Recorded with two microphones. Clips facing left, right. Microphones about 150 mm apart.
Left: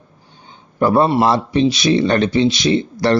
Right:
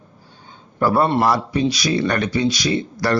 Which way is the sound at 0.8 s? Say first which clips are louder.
Left 3 dB; 20° left (ahead or behind).